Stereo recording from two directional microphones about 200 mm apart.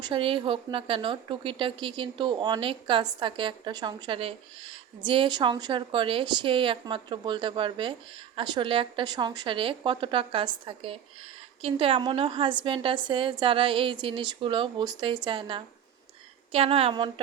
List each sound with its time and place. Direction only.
0.0 s speech: 25° right (ahead or behind)